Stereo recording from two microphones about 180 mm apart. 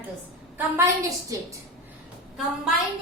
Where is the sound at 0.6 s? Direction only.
15° right (ahead or behind).